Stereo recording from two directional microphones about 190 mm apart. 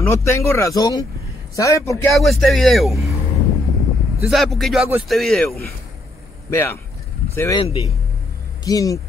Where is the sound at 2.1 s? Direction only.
Centre (ahead or behind).